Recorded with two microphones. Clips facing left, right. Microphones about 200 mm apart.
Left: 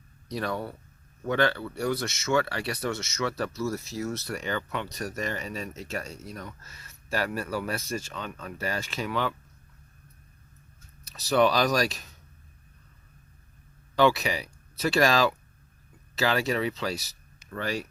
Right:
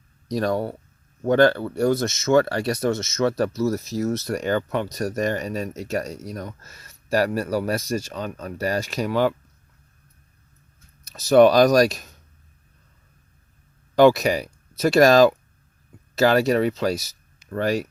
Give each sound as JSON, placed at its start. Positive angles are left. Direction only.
{"t": 0.3, "sound": "speech", "side_deg": -40}
{"t": 11.0, "sound": "speech", "side_deg": -45}
{"t": 13.9, "sound": "speech", "side_deg": -45}